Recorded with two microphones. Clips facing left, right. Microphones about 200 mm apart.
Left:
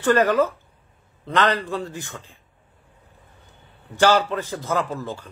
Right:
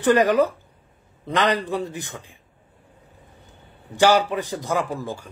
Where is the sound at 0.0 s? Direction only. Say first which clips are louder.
Right 1 dB; 15° right (ahead or behind).